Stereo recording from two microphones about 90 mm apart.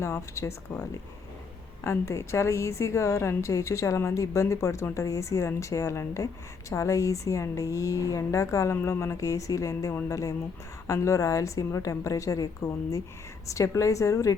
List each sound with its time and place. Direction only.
0.0 s a woman's voice: 30° left (ahead or behind)